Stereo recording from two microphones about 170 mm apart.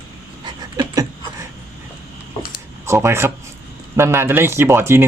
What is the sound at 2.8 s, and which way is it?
Speech, 15° right (ahead or behind).